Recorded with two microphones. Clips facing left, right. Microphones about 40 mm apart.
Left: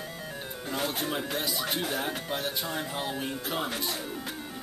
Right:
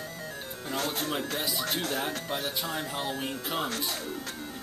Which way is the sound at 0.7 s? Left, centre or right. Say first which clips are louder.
Even; centre.